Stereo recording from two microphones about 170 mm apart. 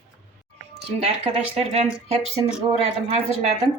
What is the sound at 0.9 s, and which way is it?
Speech, 35° right (ahead or behind).